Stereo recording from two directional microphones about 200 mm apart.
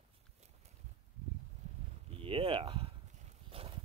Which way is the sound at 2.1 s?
25° right (ahead or behind).